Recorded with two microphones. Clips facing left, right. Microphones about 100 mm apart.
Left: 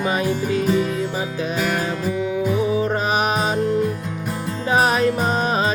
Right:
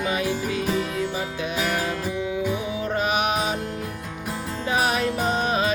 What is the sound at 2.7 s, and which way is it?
Music, 35° left (ahead or behind).